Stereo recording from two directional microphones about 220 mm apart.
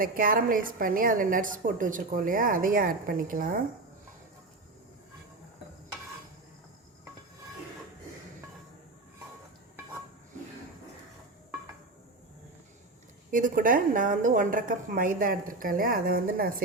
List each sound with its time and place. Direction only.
0.0 s a woman's voice: 40° right (ahead or behind)
13.3 s a woman's voice: 35° right (ahead or behind)